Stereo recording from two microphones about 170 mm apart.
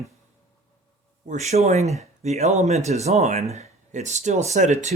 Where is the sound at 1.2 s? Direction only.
45° right (ahead or behind).